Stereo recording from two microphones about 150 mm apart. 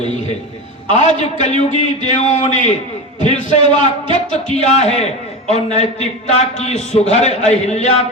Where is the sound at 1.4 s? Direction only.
50° left (ahead or behind).